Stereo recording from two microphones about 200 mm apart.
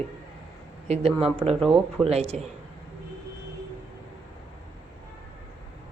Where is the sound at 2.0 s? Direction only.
30° right (ahead or behind).